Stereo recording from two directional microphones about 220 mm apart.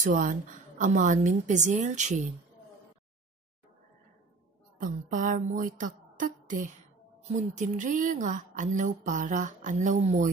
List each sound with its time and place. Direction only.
0.0 s a woman's voice: 35° right (ahead or behind)
5.1 s a woman's voice: 35° right (ahead or behind)